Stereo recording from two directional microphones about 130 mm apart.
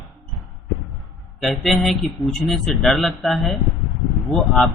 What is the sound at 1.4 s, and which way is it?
A man's voice, centre (ahead or behind).